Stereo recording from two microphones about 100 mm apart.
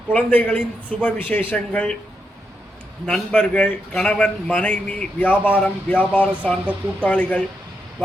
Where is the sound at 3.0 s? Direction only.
15° left (ahead or behind).